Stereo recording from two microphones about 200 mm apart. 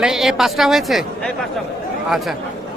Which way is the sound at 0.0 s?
Centre (ahead or behind).